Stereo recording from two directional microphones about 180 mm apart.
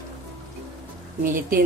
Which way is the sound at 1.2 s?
50° right (ahead or behind).